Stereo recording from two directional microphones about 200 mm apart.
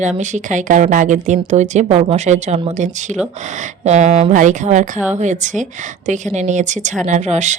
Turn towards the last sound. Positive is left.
turn(degrees=-35)  # may be behind; listen again after turning